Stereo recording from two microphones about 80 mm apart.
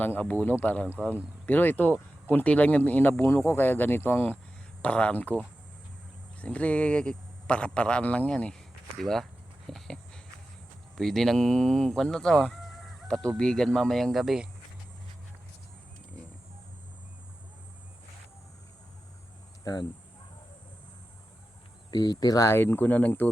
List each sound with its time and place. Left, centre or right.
0.0 s speech: left
4.8 s speech: centre
6.4 s speech: centre
9.6 s a sound: centre
10.9 s speech: centre
21.8 s speech: left
22.4 s speech: left